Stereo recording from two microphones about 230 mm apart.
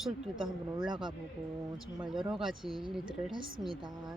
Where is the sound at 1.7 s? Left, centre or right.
Centre.